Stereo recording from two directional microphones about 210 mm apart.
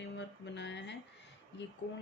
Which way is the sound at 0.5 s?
55° left (ahead or behind).